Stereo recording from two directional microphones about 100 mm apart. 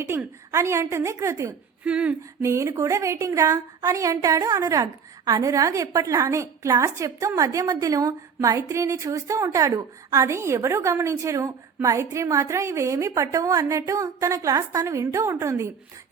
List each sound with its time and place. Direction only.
0.1 s a woman's voice: 30° right (ahead or behind)
1.8 s speech: 15° right (ahead or behind)
2.4 s a woman's voice: 30° right (ahead or behind)